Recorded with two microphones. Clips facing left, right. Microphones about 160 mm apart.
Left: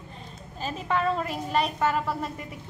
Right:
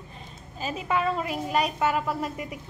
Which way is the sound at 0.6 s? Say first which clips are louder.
Even; 5° right (ahead or behind).